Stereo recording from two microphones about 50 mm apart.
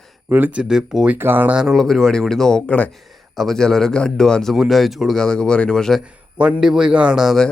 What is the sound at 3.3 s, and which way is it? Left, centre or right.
Speech, centre.